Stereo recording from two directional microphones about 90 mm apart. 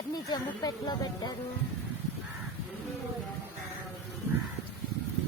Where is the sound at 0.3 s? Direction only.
50° left (ahead or behind).